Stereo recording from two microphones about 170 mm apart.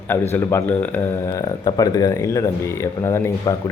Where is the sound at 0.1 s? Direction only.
15° left (ahead or behind).